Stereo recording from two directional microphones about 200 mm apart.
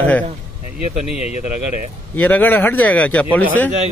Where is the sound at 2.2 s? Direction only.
10° left (ahead or behind).